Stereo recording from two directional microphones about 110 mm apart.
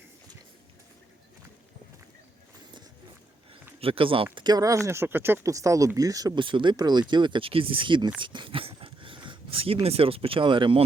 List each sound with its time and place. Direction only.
3.8 s speech: 55° right (ahead or behind); by 6.4 s 35° right (ahead or behind)
6.4 s speech: 50° right (ahead or behind)
8.2 s a sound: 50° right (ahead or behind)
9.8 s speech: 60° right (ahead or behind)